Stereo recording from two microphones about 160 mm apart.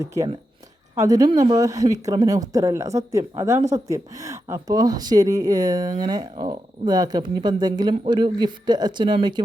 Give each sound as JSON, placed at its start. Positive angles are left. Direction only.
{"t": 1.0, "sound": "speech", "side_deg": -25}